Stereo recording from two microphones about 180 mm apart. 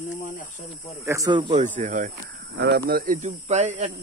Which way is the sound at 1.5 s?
40° right (ahead or behind).